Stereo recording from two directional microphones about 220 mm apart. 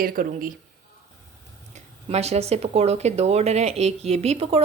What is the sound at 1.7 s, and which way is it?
Speech, 30° right (ahead or behind).